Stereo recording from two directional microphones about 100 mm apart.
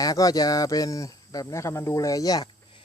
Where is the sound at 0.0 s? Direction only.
35° left (ahead or behind).